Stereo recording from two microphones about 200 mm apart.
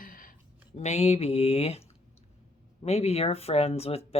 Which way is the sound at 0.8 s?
35° left (ahead or behind).